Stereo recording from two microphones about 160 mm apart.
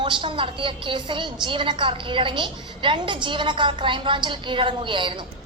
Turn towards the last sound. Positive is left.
turn(degrees=-30)  # may be behind; listen again after turning